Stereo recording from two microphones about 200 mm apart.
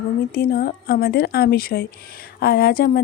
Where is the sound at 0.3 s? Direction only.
50° left (ahead or behind).